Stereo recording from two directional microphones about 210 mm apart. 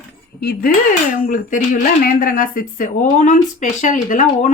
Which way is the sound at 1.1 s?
40° left (ahead or behind).